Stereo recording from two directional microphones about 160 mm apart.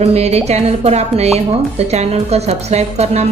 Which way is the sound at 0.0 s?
40° right (ahead or behind).